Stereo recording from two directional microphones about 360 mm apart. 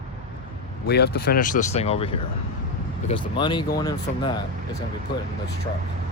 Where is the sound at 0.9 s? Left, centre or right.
Left.